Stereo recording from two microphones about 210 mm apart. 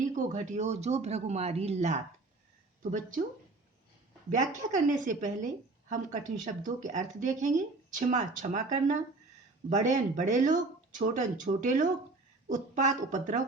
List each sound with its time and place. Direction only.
0.1 s speech: 35° right (ahead or behind)
4.6 s speech: 35° right (ahead or behind)